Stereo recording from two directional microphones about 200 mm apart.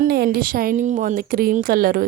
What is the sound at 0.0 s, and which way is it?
A woman's voice, 50° right (ahead or behind).